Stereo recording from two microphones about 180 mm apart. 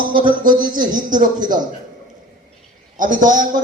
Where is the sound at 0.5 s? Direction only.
25° right (ahead or behind).